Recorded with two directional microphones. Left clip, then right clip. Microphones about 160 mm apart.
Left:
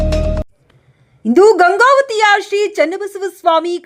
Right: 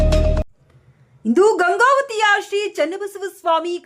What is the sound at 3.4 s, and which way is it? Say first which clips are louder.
Speech: left 6 dB; 25° left (ahead or behind).